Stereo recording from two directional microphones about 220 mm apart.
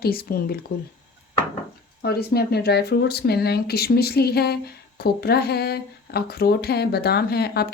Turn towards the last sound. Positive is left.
turn(degrees=45)  # may be behind; listen again after turning